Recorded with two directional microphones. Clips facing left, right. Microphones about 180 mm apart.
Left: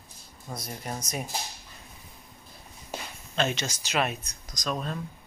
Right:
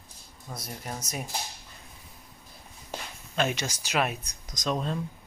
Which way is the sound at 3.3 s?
10° right (ahead or behind).